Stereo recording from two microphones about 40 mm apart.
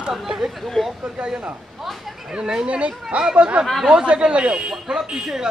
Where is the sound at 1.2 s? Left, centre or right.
Right.